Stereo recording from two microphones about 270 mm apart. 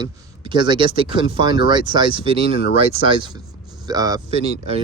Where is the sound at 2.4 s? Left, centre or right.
Left.